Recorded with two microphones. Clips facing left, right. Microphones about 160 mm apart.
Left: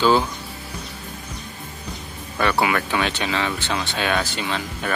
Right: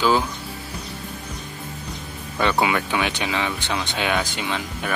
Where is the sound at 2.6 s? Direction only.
15° right (ahead or behind).